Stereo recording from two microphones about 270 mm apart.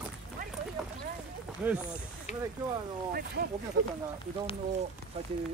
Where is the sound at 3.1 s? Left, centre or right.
Right.